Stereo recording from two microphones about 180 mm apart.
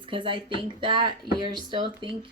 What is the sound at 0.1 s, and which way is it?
Speech, 30° right (ahead or behind).